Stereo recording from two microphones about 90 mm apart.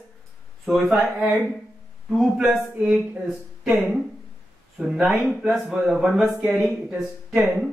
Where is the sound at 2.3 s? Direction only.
5° right (ahead or behind).